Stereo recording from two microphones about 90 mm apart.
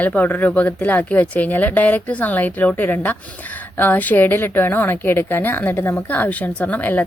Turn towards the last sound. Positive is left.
turn(degrees=20)  # may be behind; listen again after turning